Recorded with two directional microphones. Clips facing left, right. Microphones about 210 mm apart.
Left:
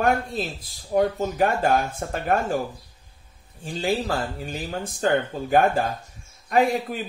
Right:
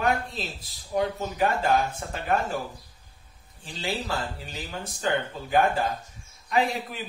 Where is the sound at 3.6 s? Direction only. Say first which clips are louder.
Left 7 dB; 50° left (ahead or behind).